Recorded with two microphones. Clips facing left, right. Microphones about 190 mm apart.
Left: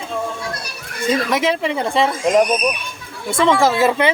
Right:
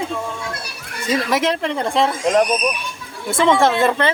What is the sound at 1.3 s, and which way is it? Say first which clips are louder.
Speech: left 1 dB; centre (ahead or behind).